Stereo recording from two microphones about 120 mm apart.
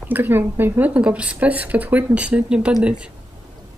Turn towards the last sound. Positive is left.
turn(degrees=-5)  # may be behind; listen again after turning